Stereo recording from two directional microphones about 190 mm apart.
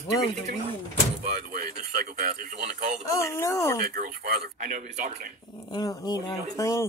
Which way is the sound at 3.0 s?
15° left (ahead or behind).